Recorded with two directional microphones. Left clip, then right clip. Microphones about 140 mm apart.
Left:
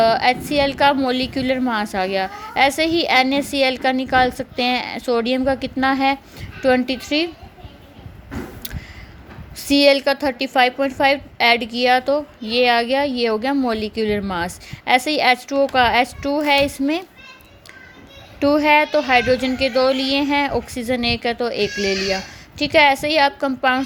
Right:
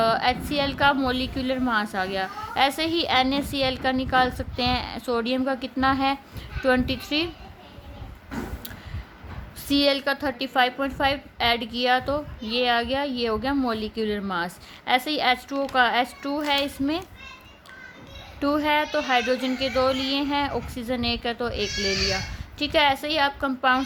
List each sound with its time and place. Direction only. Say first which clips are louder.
0.0 s a woman's voice: left 6 dB; 25° left (ahead or behind)
9.6 s a woman's voice: left 8 dB; 30° left (ahead or behind)
18.3 s a woman's voice: left 8 dB; 30° left (ahead or behind)